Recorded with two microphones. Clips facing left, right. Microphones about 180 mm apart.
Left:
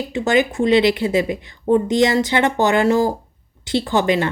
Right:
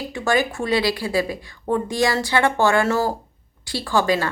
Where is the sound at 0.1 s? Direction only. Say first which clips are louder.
Left 4 dB; 20° left (ahead or behind).